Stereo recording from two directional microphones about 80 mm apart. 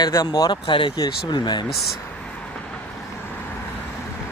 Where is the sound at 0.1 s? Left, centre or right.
Left.